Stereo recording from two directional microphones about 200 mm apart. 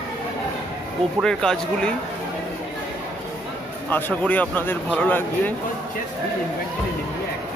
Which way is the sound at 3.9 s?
10° left (ahead or behind).